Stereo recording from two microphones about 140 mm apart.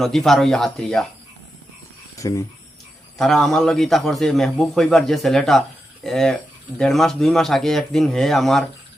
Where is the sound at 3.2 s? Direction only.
5° left (ahead or behind).